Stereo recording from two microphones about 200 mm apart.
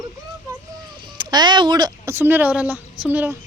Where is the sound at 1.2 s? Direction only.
20° right (ahead or behind).